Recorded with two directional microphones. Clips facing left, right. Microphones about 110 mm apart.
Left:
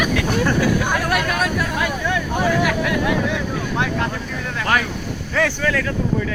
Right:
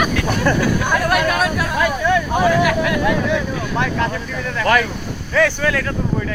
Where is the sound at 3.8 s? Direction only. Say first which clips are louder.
Right 3 dB; 65° right (ahead or behind).